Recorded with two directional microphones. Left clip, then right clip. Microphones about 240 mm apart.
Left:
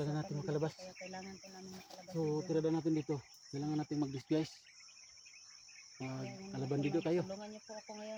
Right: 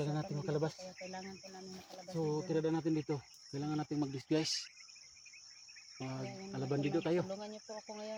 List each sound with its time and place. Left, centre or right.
0.0 s cricket: centre
2.1 s speech: centre
6.0 s cricket: centre
6.5 s speech: centre
7.3 s speech: centre